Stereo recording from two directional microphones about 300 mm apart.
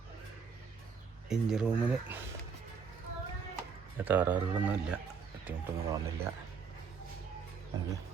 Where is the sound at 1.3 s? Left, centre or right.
Centre.